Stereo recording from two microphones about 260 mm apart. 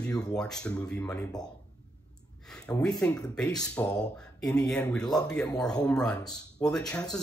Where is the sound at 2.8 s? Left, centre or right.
Centre.